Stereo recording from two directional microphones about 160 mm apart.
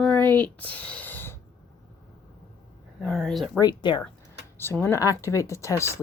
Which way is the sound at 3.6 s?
30° left (ahead or behind).